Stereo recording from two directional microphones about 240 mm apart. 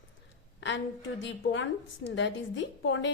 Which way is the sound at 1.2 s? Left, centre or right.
Left.